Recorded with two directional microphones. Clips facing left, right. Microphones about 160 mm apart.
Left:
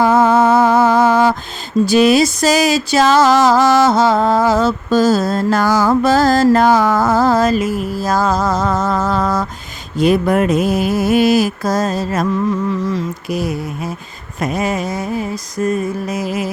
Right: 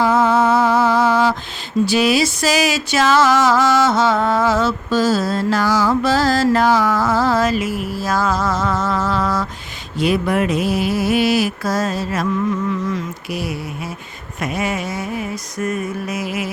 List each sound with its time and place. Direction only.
0.0 s a sound: 50° left (ahead or behind)
1.9 s music: 45° left (ahead or behind)
14.4 s mantra: 40° left (ahead or behind)